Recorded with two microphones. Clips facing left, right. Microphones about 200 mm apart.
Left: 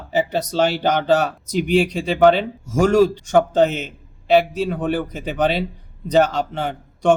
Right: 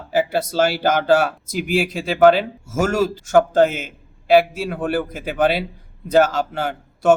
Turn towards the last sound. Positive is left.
turn(degrees=-5)  # may be behind; listen again after turning